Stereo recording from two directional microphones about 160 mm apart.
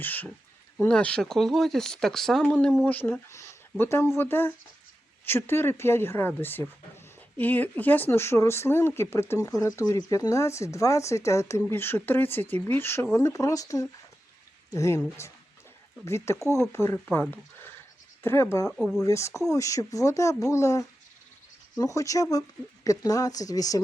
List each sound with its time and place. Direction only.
0.0 s speech: 10° left (ahead or behind)
16.0 s speech: 15° left (ahead or behind)
18.8 s speech: centre (ahead or behind)
19.0 s speech: 20° left (ahead or behind)